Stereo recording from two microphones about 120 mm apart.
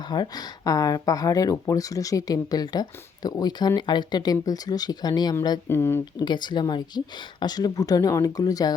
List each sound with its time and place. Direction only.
0.1 s speech: 35° left (ahead or behind)
5.6 s speech: 20° left (ahead or behind)
6.1 s speech: 40° left (ahead or behind)